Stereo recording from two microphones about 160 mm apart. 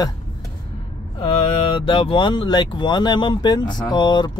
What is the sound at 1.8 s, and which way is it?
Speech, 30° left (ahead or behind).